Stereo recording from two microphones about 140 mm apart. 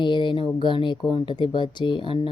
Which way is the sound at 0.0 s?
35° left (ahead or behind).